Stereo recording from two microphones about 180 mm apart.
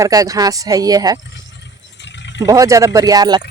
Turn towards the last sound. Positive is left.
turn(degrees=-20)  # may be behind; listen again after turning